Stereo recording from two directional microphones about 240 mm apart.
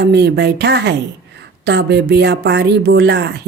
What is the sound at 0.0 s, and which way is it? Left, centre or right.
Speech, right.